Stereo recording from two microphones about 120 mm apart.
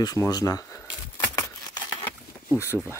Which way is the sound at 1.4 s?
30° left (ahead or behind).